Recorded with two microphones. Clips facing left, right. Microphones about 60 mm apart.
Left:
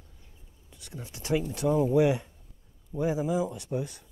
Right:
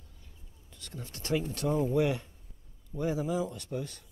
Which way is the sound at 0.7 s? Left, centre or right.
Centre.